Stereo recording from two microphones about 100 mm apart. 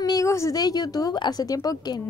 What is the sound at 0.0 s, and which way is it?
A woman's voice, 35° left (ahead or behind).